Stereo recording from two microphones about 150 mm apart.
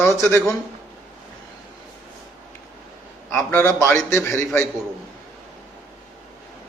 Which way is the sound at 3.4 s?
10° left (ahead or behind).